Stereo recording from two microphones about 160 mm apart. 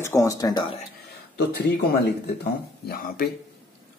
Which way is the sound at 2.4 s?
70° left (ahead or behind).